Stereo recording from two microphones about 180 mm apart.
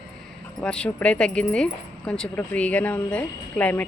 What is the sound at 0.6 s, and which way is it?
A woman's voice, 5° left (ahead or behind).